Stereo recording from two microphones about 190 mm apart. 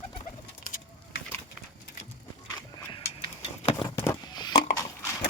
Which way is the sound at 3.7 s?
25° left (ahead or behind).